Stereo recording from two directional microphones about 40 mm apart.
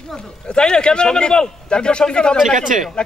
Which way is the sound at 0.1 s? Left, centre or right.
Centre.